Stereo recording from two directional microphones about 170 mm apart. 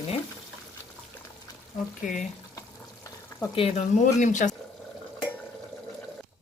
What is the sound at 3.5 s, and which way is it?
Speech, 40° left (ahead or behind).